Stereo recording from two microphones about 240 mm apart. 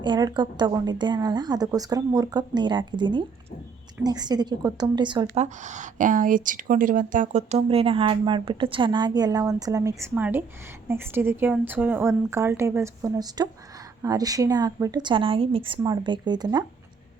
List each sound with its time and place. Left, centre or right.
0.0 s a woman's voice: centre